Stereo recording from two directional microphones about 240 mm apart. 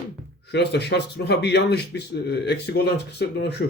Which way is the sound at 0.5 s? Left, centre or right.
Left.